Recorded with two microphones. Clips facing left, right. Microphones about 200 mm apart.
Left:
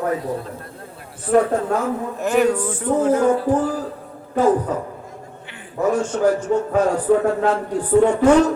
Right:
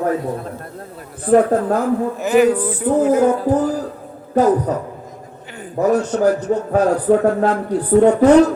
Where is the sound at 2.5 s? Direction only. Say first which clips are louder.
Right 3 dB; 35° right (ahead or behind).